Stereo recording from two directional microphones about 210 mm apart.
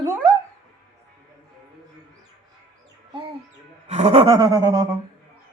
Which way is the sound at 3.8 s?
30° right (ahead or behind).